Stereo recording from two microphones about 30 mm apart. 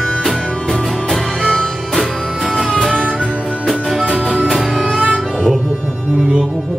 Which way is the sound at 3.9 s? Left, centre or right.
Centre.